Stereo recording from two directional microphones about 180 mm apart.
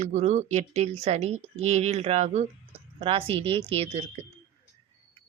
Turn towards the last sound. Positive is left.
turn(degrees=-30)  # may be behind; listen again after turning